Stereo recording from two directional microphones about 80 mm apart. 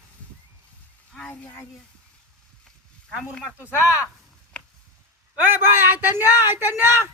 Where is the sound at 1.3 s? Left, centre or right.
Left.